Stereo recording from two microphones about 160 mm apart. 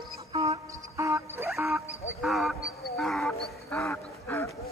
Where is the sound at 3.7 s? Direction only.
15° left (ahead or behind).